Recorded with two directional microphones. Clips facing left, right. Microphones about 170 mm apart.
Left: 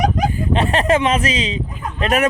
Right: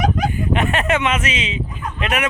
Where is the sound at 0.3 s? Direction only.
35° left (ahead or behind).